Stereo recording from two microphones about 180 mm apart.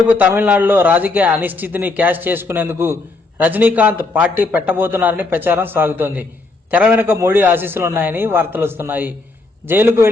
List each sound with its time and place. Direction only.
0.1 s a man's voice: 10° right (ahead or behind)